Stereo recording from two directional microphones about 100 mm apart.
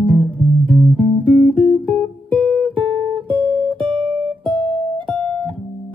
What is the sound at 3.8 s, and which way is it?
Music, 55° right (ahead or behind).